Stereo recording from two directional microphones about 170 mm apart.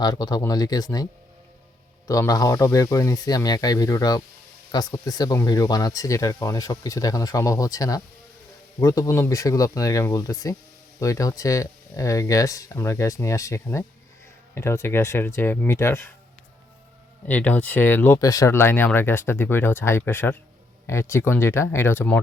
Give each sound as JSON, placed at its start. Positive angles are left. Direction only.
{"t": 0.0, "sound": "speech", "side_deg": 25}
{"t": 2.0, "sound": "speech", "side_deg": 20}
{"t": 17.2, "sound": "speech", "side_deg": 10}